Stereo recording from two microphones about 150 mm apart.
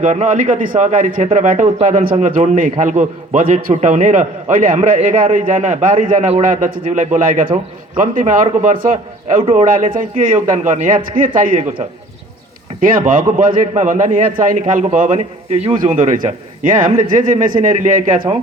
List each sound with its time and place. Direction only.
0.0 s a man's voice: 55° right (ahead or behind)
12.8 s a man's voice: 65° right (ahead or behind); by 15.8 s 50° right (ahead or behind)
15.8 s a man's voice: 60° right (ahead or behind)